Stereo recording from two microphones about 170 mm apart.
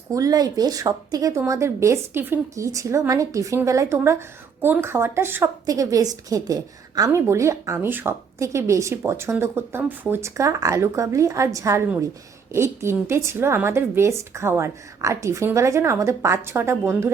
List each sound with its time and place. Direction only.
0.1 s a woman's voice: 20° right (ahead or behind)